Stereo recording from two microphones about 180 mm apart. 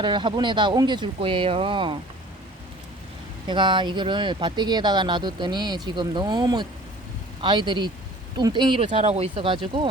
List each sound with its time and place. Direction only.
0.0 s speech: 25° right (ahead or behind)
3.4 s speech: 25° right (ahead or behind)